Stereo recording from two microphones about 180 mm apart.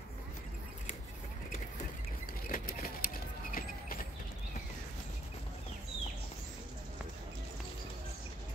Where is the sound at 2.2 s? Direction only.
50° left (ahead or behind).